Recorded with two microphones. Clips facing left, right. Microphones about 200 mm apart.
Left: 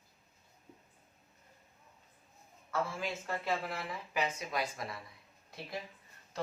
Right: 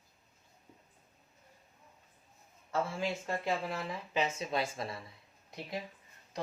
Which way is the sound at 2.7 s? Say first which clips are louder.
Right 2 dB; 20° right (ahead or behind).